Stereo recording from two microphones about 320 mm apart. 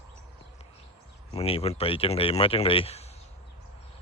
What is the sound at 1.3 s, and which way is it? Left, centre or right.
Speech, centre.